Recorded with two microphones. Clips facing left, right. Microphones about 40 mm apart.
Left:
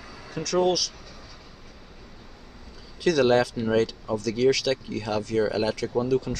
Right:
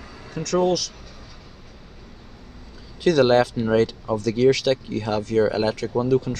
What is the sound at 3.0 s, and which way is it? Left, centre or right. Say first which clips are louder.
Speech: right 4 dB; right.